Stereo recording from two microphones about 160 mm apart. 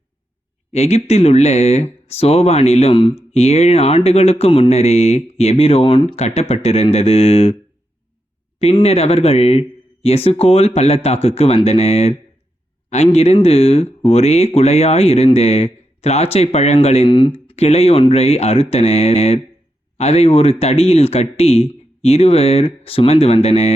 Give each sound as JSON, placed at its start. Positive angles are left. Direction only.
{"t": 0.7, "sound": "speech", "side_deg": 45}
{"t": 8.5, "sound": "speech", "side_deg": 40}